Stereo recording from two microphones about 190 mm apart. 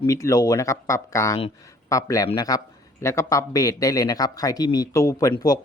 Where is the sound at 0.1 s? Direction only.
15° left (ahead or behind).